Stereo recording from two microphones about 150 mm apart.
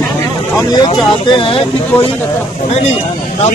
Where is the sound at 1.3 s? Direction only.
35° left (ahead or behind).